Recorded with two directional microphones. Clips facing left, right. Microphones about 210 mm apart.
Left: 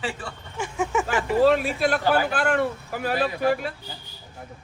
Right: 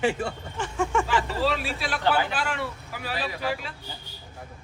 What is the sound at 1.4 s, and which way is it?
A man's voice, 50° left (ahead or behind).